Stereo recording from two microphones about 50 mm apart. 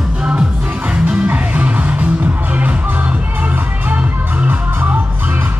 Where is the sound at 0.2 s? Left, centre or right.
Right.